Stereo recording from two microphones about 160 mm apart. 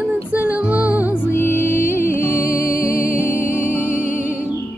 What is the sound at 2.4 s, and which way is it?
Music, 60° left (ahead or behind).